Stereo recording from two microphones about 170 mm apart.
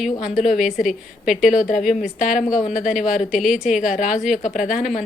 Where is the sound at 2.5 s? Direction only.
50° left (ahead or behind).